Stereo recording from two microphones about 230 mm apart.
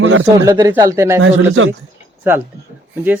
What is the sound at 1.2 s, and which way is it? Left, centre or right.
Speech, right.